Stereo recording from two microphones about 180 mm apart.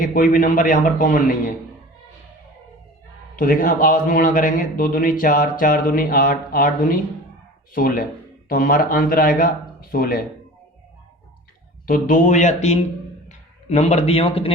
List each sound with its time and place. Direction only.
0.0 s a man's voice: 50° left (ahead or behind)
3.3 s a man's voice: 55° left (ahead or behind)
11.9 s a man's voice: 45° left (ahead or behind); by 14.5 s 30° left (ahead or behind)